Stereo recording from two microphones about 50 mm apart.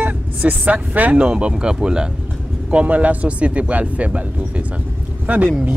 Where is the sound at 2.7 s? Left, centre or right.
Right.